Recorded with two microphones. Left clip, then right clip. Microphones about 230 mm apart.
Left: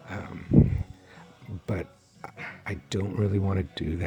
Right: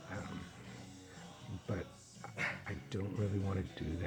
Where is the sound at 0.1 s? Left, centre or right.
Left.